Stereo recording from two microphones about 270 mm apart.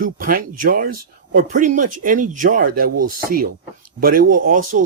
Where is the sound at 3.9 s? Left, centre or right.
Right.